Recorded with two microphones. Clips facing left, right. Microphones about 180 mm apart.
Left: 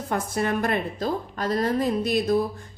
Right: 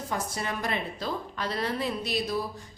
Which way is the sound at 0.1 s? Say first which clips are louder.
Left 8 dB; 55° left (ahead or behind).